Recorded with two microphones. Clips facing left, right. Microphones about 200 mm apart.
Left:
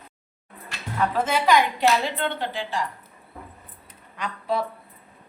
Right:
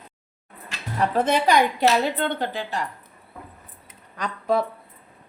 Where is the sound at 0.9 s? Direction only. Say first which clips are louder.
Right 3 dB; 40° right (ahead or behind).